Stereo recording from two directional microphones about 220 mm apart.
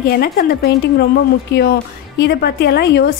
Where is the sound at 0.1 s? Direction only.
45° left (ahead or behind).